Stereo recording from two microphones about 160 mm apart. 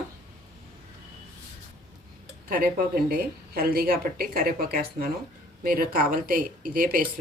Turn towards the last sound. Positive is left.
turn(degrees=-60)  # may be behind; listen again after turning